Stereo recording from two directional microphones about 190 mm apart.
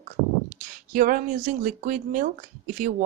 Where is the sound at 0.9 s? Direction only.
45° right (ahead or behind).